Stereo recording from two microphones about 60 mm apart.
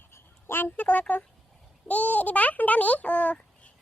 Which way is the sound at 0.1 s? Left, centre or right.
Left.